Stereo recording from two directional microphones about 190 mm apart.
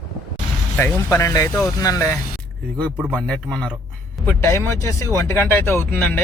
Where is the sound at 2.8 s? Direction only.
5° left (ahead or behind).